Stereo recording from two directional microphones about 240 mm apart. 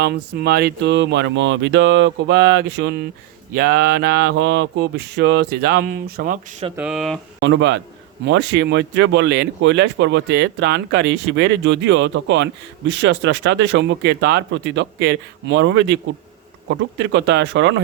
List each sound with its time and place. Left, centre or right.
0.0 s speech: right
3.5 s a sound: right
6.7 s speech: centre
7.3 s speech: right